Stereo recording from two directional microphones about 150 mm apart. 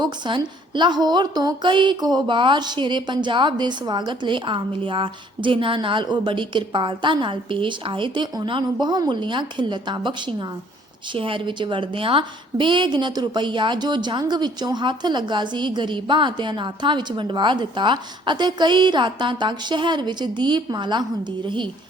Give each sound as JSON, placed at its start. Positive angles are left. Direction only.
{"t": 0.0, "sound": "a woman's voice", "side_deg": -30}